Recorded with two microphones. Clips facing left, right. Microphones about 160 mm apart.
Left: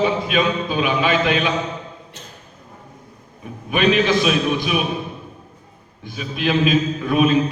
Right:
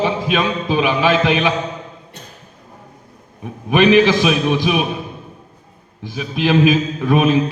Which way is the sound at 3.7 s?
90° right.